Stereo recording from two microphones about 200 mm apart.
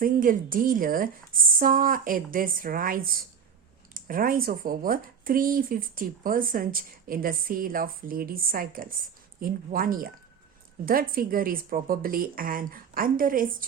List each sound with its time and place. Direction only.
0.0 s speech: 45° right (ahead or behind)